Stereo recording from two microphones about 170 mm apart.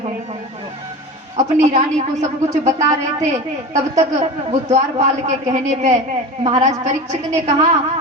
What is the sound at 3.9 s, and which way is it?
Speech, 40° right (ahead or behind).